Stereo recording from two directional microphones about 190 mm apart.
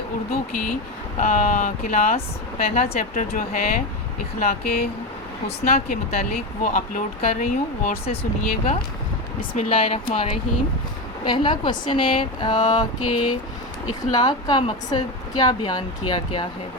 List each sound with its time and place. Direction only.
1.2 s speech: 45° left (ahead or behind)
11.3 s a woman's voice: 25° left (ahead or behind)